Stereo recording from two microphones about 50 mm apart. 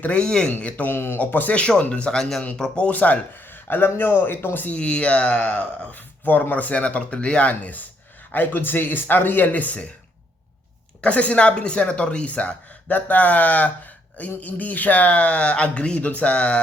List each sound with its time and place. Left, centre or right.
0.2 s a man's voice: centre
0.9 s speech: left
1.2 s speech: left
1.5 s speech: left
2.9 s speech: left
4.6 s speech: left
11.0 s speech: left